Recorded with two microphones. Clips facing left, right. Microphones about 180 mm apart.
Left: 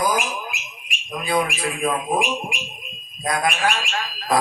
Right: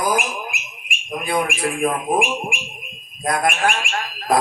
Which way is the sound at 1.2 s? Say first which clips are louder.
Right 1 dB; 50° right (ahead or behind).